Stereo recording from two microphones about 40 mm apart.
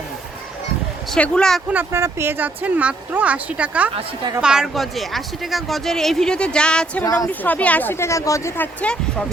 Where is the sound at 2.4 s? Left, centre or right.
Right.